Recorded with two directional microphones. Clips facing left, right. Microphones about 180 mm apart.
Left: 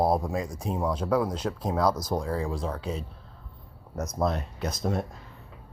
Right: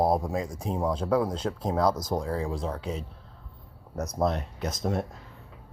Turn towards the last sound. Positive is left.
turn(degrees=-20)  # may be behind; listen again after turning